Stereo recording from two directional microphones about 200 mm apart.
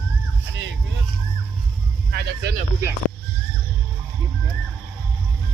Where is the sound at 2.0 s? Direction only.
55° right (ahead or behind).